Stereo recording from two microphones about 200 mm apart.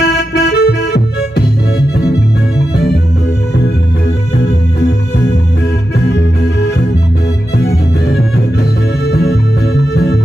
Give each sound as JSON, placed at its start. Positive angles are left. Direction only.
{"t": 0.0, "sound": "music", "side_deg": 55}
{"t": 2.7, "sound": "music", "side_deg": 55}
{"t": 4.4, "sound": "music", "side_deg": 55}